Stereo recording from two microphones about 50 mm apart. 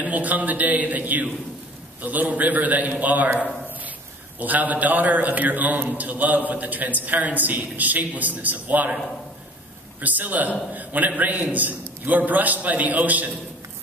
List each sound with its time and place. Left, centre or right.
0.0 s a man's voice: right
4.4 s a man's voice: right
9.9 s a man's voice: right